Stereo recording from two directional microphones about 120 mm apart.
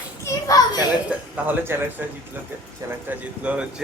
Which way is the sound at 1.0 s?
15° right (ahead or behind).